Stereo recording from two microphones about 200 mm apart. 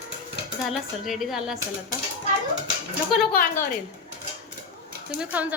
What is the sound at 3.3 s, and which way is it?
Speech, 45° left (ahead or behind).